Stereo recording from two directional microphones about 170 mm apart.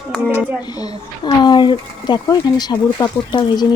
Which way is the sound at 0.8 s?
25° left (ahead or behind).